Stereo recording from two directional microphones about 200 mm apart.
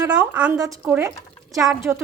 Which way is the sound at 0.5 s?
15° right (ahead or behind).